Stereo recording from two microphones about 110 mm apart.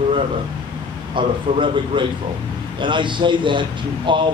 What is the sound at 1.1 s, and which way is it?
A man's voice, 45° right (ahead or behind).